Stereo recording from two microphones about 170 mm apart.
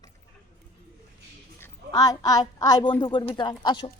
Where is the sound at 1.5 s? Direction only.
15° left (ahead or behind).